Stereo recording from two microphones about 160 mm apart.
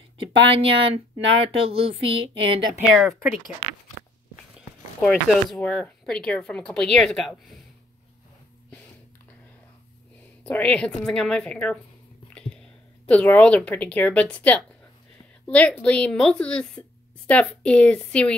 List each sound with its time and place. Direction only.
0.2 s speech: 35° right (ahead or behind)
3.1 s speech: 15° right (ahead or behind)
4.6 s speech: centre (ahead or behind)
10.4 s a woman's voice: 10° left (ahead or behind)
12.4 s whispering: 5° left (ahead or behind)
13.1 s a woman's voice: 10° left (ahead or behind)